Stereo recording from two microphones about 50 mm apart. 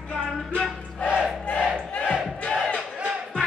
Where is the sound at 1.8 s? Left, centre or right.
Left.